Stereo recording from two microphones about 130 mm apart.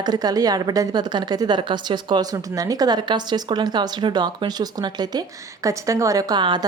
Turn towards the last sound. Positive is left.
turn(degrees=-35)  # may be behind; listen again after turning